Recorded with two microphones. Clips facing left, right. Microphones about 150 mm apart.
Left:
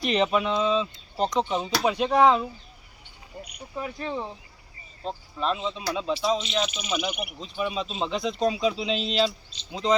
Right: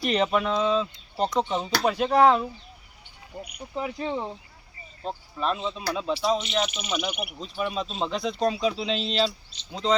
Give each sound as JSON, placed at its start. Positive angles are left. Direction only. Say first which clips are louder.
{"t": 0.0, "sound": "speech", "louder": "even", "side_deg": 0}
{"t": 3.3, "sound": "cricket", "louder": "right 2 dB", "side_deg": -20}
{"t": 5.0, "sound": "speech", "louder": "even", "side_deg": 0}